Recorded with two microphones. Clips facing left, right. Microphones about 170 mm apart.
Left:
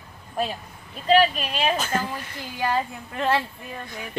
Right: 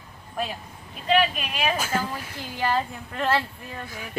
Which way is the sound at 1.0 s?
35° left (ahead or behind).